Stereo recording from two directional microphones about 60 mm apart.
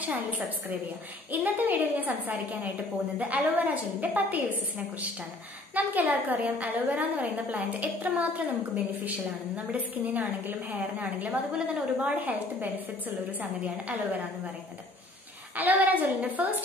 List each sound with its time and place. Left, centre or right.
0.0 s a woman's voice: right
15.5 s a woman's voice: right